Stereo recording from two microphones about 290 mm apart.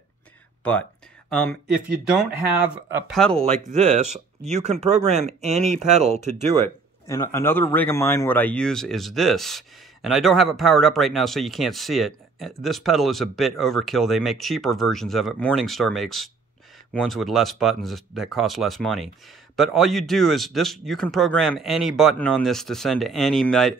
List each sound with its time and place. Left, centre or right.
1.3 s speech: centre
3.6 s speech: right
7.1 s speech: centre